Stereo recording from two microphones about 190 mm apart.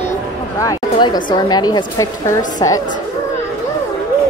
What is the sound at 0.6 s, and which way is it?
Speech, 20° left (ahead or behind).